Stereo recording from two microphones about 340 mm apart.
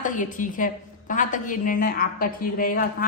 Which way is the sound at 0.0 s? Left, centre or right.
Left.